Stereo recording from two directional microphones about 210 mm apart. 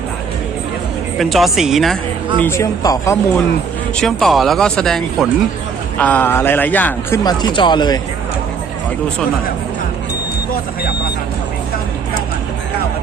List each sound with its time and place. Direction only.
1.2 s speech: centre (ahead or behind)
2.4 s a man's voice: 15° left (ahead or behind)
3.9 s a man's voice: centre (ahead or behind)
7.3 s speech: 20° left (ahead or behind)